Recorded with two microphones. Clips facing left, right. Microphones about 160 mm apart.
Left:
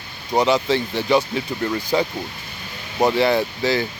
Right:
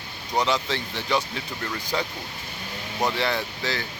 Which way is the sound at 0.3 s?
5° left (ahead or behind).